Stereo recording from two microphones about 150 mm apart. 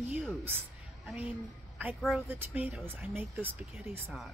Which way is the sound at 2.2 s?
15° right (ahead or behind).